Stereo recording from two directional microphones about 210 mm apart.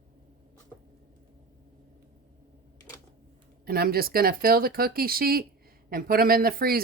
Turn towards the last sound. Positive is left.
turn(degrees=-45)  # may be behind; listen again after turning